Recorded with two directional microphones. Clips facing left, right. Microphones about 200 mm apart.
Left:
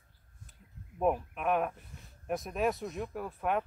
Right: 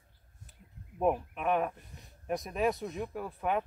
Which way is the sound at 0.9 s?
Centre (ahead or behind).